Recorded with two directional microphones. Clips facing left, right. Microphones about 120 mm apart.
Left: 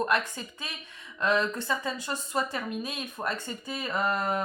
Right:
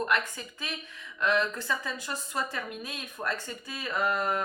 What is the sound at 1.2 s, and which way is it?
Speech, 30° left (ahead or behind).